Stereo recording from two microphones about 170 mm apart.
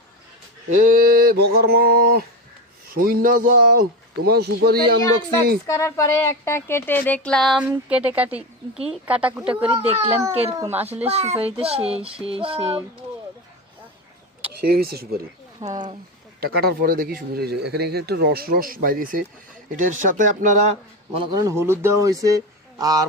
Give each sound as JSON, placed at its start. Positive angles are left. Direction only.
{"t": 0.8, "sound": "speech", "side_deg": -55}
{"t": 5.6, "sound": "speech", "side_deg": 20}
{"t": 7.6, "sound": "speech", "side_deg": -10}
{"t": 9.7, "sound": "a child's voice", "side_deg": -35}
{"t": 10.6, "sound": "speech", "side_deg": -10}
{"t": 11.0, "sound": "a child's voice", "side_deg": -40}
{"t": 14.6, "sound": "speech", "side_deg": -65}
{"t": 15.6, "sound": "speech", "side_deg": -20}
{"t": 16.4, "sound": "speech", "side_deg": -65}
{"t": 21.3, "sound": "speech", "side_deg": -15}